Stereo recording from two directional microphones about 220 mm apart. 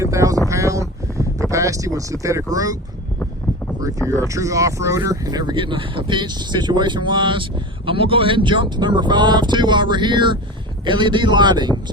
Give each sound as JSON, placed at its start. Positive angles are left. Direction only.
{"t": 0.0, "sound": "speech", "side_deg": -15}
{"t": 3.8, "sound": "speech", "side_deg": -15}